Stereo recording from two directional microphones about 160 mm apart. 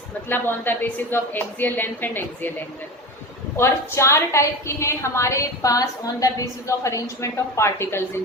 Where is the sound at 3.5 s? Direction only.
15° left (ahead or behind).